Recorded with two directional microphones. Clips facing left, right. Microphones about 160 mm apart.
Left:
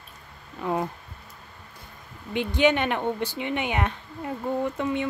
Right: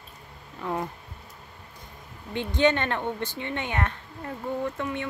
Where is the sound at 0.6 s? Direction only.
15° left (ahead or behind).